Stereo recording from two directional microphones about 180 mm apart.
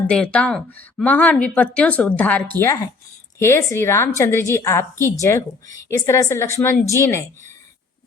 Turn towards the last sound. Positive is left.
turn(degrees=15)  # may be behind; listen again after turning